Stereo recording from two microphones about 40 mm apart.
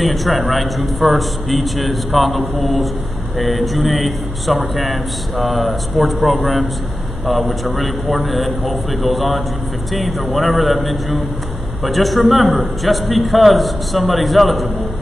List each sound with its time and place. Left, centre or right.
0.0 s a man's voice: centre